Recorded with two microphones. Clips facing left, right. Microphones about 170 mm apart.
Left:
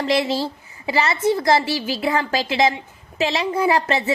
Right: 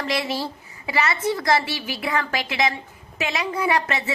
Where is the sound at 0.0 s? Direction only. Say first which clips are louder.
Left 5 dB; 25° left (ahead or behind).